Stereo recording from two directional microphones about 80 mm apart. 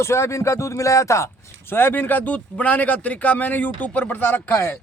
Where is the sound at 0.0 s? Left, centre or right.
Left.